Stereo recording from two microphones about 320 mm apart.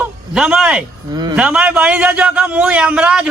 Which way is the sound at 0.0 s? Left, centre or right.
Centre.